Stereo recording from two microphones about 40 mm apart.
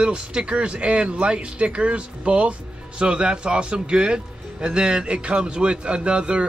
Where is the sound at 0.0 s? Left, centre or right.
Right.